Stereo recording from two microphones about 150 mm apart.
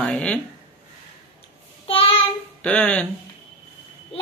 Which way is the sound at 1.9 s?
40° left (ahead or behind).